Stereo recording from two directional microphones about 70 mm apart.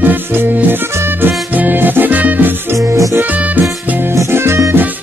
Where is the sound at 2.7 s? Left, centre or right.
Right.